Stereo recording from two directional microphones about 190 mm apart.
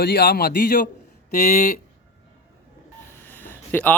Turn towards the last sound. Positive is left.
turn(degrees=10)  # may be behind; listen again after turning